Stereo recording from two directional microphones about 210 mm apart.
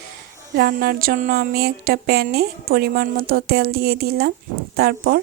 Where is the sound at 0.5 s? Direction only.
45° right (ahead or behind).